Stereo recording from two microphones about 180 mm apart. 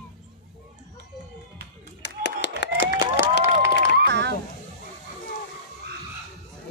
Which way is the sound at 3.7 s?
70° right (ahead or behind).